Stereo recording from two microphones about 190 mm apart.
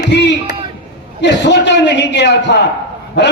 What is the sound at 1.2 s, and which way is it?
A man's voice, 65° left (ahead or behind).